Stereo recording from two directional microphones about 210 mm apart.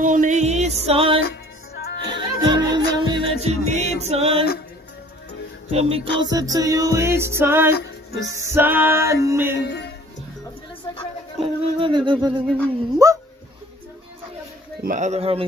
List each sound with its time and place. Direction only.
0.0 s music: 40° right (ahead or behind)
1.2 s music: 50° left (ahead or behind)
2.1 s music: 20° right (ahead or behind)
5.7 s music: 30° right (ahead or behind); by 9.6 s 10° right (ahead or behind)
9.6 s speech: 55° left (ahead or behind)
11.3 s music: 25° right (ahead or behind)
14.8 s speech: 35° right (ahead or behind)